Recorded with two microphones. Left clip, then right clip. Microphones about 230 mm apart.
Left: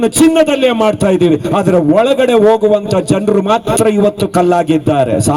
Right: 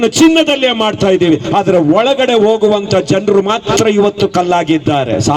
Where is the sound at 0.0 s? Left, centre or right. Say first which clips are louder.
Even; left.